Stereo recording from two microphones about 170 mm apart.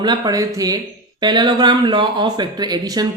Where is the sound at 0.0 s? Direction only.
25° right (ahead or behind).